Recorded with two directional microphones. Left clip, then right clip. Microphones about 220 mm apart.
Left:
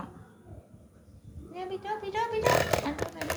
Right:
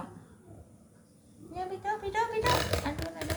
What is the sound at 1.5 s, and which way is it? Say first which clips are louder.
Speech: right 1 dB; 5° left (ahead or behind).